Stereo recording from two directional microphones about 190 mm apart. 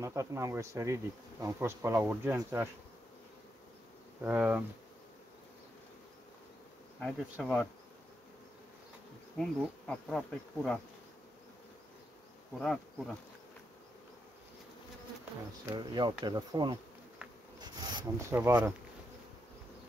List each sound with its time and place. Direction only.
0.0 s bee: 15° right (ahead or behind)
4.2 s bee: 10° right (ahead or behind)
7.0 s bee: 5° left (ahead or behind)
9.4 s bee: 5° left (ahead or behind)
12.5 s bee: 5° left (ahead or behind)
15.7 s speech: 25° right (ahead or behind)
17.6 s rub: 20° right (ahead or behind)
18.3 s bee: 10° right (ahead or behind)